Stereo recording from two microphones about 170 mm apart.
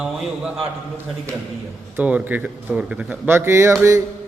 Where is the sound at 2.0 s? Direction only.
10° right (ahead or behind).